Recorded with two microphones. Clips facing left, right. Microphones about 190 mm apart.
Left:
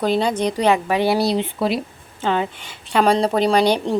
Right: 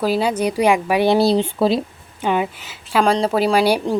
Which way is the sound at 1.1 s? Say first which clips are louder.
Right 4 dB; 30° right (ahead or behind).